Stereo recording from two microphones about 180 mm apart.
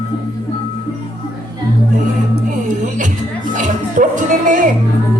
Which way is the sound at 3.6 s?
45° right (ahead or behind).